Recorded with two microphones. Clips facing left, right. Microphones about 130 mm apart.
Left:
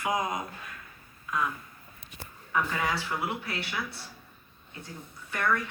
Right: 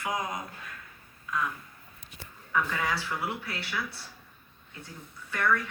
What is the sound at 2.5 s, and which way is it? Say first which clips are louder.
Speech: even; 15° left (ahead or behind).